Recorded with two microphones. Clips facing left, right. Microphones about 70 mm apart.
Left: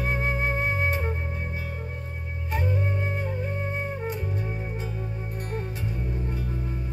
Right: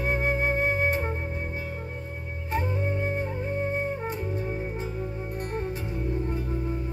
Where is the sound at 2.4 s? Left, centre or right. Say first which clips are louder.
Even; right.